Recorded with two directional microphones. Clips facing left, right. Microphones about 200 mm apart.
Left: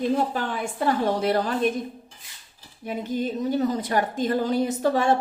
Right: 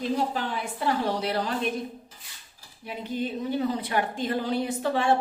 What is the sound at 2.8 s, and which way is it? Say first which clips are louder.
A woman's voice: left 4 dB; 45° left (ahead or behind).